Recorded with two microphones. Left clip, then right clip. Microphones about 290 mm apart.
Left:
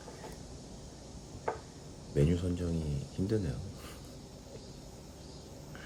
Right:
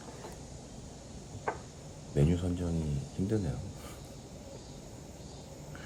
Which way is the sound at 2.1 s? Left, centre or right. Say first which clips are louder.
Even; centre.